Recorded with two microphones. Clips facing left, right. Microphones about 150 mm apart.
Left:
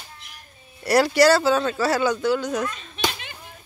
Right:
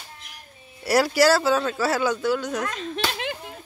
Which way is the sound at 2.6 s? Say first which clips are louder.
Even; 90° right.